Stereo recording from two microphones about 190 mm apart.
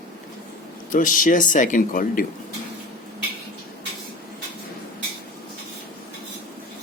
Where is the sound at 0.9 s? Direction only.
45° left (ahead or behind).